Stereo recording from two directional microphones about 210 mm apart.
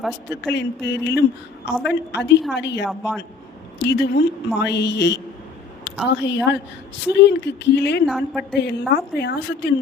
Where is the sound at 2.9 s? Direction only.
Centre (ahead or behind).